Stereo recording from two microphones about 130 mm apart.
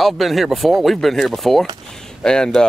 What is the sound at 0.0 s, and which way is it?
Speech, centre (ahead or behind).